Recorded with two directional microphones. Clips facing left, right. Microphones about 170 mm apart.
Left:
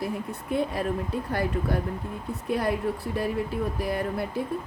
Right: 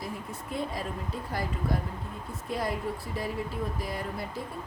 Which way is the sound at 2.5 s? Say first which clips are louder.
Left 5 dB; 65° left (ahead or behind).